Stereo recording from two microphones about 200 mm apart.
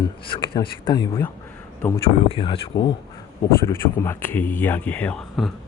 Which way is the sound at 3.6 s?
10° left (ahead or behind).